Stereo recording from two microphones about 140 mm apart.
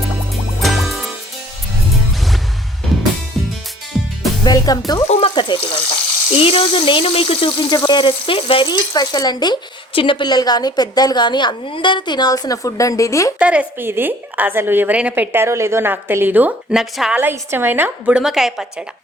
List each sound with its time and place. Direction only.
0.6 s music: centre (ahead or behind)
3.9 s music: centre (ahead or behind)
4.4 s music: 25° left (ahead or behind)
5.0 s water: 50° left (ahead or behind)
5.3 s speech: 35° left (ahead or behind)
13.4 s a woman's voice: 10° right (ahead or behind)